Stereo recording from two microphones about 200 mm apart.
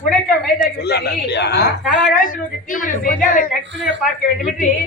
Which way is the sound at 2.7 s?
40° left (ahead or behind).